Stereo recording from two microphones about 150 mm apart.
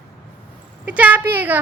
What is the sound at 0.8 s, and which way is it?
Speech, 10° right (ahead or behind).